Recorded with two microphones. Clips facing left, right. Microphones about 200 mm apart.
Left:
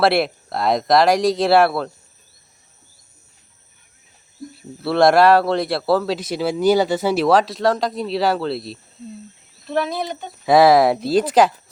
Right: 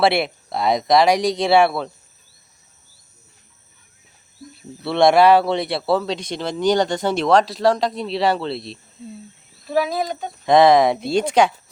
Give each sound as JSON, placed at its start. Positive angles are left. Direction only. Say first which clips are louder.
{"t": 0.0, "sound": "speech", "louder": "left 1 dB", "side_deg": 0}
{"t": 4.8, "sound": "speech", "louder": "even", "side_deg": 0}